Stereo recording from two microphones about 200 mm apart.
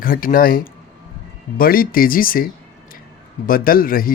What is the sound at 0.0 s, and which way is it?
Speech, 45° left (ahead or behind).